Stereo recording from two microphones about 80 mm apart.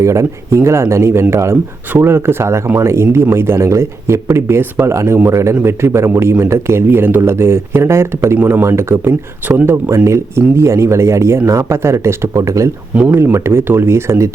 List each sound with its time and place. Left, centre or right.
0.0 s speech: right
8.4 s speech: right
8.6 s speech: right
9.5 s speech: right
9.9 s speech: right
13.1 s speech: right